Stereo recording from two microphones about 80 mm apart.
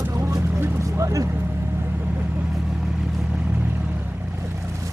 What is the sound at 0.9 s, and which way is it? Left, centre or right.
Vehicle, right.